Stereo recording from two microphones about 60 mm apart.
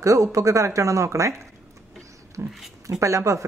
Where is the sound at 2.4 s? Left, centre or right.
Right.